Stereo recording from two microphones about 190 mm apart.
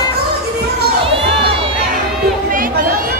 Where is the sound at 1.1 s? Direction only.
30° right (ahead or behind).